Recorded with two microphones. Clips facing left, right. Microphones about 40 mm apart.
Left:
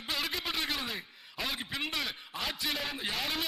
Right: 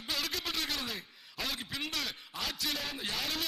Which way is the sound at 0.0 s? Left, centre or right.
Centre.